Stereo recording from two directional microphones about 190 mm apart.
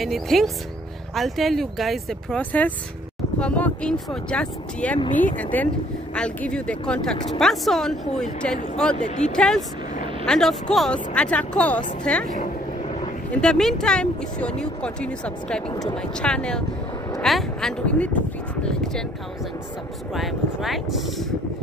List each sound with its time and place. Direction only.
0.0 s speech: centre (ahead or behind)
9.0 s speech: 40° left (ahead or behind)
9.3 s speech: centre (ahead or behind)
13.3 s speech: 5° left (ahead or behind)
20.2 s speech: centre (ahead or behind)